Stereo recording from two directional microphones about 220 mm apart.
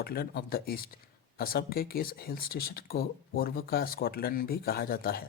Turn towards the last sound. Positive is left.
turn(degrees=40)  # may be behind; listen again after turning